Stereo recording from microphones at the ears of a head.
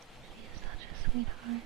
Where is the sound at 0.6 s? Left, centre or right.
Right.